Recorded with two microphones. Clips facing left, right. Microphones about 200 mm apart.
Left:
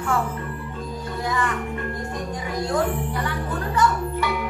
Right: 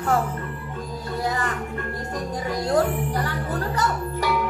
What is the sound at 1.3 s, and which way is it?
Music, 40° right (ahead or behind).